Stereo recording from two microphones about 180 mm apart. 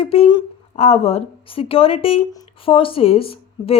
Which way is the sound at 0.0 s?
35° left (ahead or behind).